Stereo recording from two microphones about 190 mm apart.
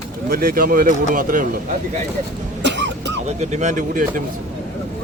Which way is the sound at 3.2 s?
35° right (ahead or behind).